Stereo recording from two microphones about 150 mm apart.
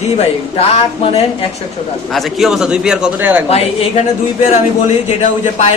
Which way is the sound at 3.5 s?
45° left (ahead or behind).